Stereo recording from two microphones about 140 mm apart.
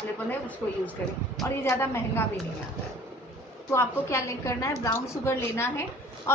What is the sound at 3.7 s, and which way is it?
A woman's voice, 20° left (ahead or behind).